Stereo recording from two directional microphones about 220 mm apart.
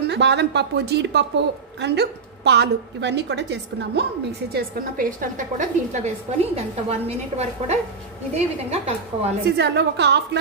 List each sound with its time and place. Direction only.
0.0 s a woman's voice: 50° right (ahead or behind); by 9.3 s 30° right (ahead or behind)
9.6 s a woman's voice: 50° right (ahead or behind)